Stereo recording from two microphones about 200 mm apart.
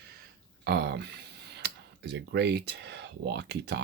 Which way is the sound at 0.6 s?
55° right (ahead or behind).